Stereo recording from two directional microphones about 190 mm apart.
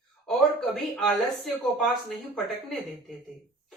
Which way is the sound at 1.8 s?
Centre (ahead or behind).